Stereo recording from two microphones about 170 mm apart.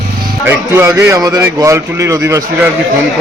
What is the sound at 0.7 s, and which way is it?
A man's voice, 15° right (ahead or behind).